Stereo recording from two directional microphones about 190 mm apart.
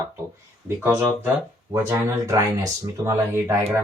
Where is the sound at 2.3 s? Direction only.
15° right (ahead or behind).